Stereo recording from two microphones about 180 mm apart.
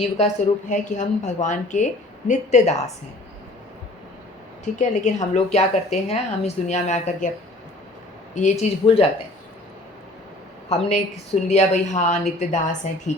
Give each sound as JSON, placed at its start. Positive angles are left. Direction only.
{"t": 0.7, "sound": "a woman's voice", "side_deg": 45}
{"t": 4.6, "sound": "a woman's voice", "side_deg": 40}
{"t": 8.4, "sound": "a woman's voice", "side_deg": 40}
{"t": 10.7, "sound": "a woman's voice", "side_deg": 35}